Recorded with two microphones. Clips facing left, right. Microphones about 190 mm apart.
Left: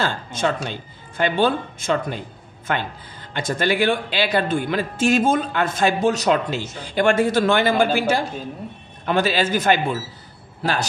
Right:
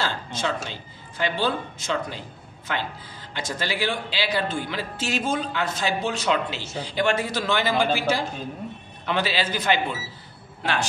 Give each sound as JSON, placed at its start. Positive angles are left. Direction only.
{"t": 0.0, "sound": "a man's voice", "side_deg": 50}